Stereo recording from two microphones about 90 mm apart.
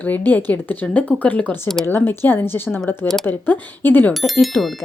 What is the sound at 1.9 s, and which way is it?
A woman's voice, 25° left (ahead or behind).